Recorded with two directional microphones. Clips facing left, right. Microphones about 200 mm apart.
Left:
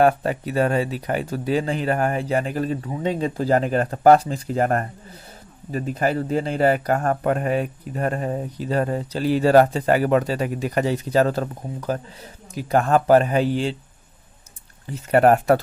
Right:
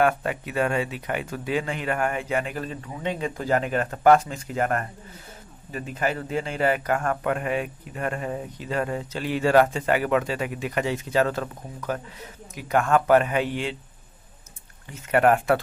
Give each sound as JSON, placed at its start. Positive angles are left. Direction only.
{"t": 0.0, "sound": "speech", "side_deg": 35}
{"t": 15.0, "sound": "speech", "side_deg": 35}